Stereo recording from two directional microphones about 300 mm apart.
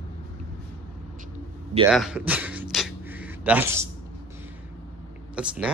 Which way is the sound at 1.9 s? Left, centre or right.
Centre.